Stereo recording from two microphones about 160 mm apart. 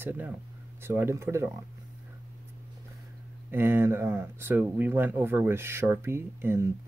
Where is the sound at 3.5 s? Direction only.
15° right (ahead or behind).